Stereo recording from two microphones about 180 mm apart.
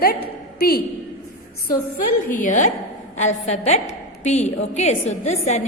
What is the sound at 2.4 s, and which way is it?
A woman's voice, 45° left (ahead or behind).